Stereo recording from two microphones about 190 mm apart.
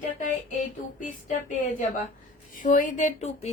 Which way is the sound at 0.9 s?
40° left (ahead or behind).